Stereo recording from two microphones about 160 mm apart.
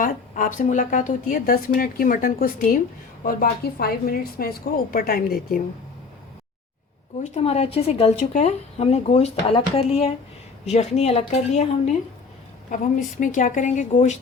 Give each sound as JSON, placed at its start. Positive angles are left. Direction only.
{"t": 0.0, "sound": "a woman's voice", "side_deg": 55}
{"t": 3.2, "sound": "a woman's voice", "side_deg": 70}
{"t": 7.3, "sound": "a woman's voice", "side_deg": 40}